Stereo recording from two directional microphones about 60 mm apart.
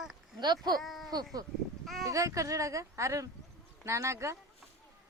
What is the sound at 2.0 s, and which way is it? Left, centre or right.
Speech, right.